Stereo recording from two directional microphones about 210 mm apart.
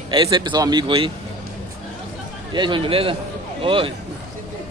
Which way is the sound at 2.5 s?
20° right (ahead or behind).